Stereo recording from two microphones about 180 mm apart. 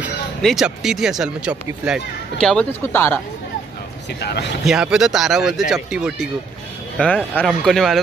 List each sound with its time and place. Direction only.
0.4 s speech: centre (ahead or behind)
2.8 s speech: 10° left (ahead or behind)
4.2 s speech: 65° left (ahead or behind)
4.6 s speech: 5° right (ahead or behind)
7.0 s speech: 5° left (ahead or behind)